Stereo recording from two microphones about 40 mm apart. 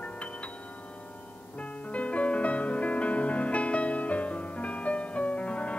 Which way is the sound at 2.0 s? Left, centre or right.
Left.